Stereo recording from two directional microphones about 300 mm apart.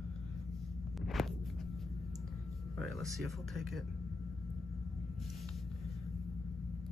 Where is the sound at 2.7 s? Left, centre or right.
Centre.